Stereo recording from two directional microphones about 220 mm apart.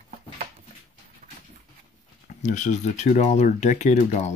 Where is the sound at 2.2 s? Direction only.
35° left (ahead or behind).